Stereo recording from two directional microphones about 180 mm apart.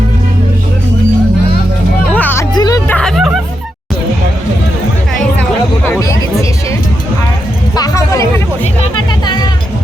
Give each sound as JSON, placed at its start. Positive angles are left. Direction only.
{"t": 2.1, "sound": "music", "side_deg": 10}
{"t": 2.6, "sound": "hubbub", "side_deg": 20}
{"t": 5.1, "sound": "music", "side_deg": 10}
{"t": 7.8, "sound": "music", "side_deg": 20}